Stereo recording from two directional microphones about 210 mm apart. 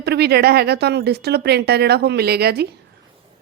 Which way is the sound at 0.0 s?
50° right (ahead or behind).